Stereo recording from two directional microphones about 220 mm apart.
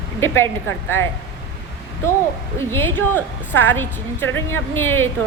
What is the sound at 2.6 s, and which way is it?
A woman's voice, 10° left (ahead or behind).